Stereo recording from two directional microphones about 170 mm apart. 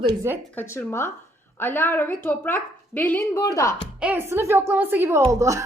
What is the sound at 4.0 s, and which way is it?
A woman's voice, 10° right (ahead or behind).